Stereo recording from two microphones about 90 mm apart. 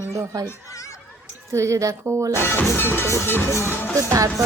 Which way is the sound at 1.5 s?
35° right (ahead or behind).